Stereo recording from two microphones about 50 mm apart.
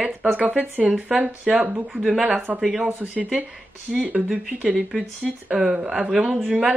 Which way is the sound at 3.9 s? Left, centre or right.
Centre.